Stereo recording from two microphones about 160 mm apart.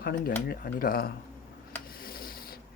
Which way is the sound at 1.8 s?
65° left (ahead or behind).